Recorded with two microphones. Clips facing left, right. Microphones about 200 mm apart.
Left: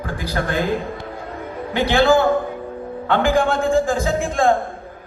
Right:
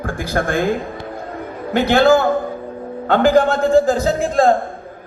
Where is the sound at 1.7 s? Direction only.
45° right (ahead or behind).